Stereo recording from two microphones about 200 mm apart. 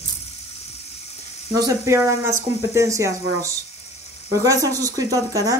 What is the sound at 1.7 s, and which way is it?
Speech, 15° right (ahead or behind).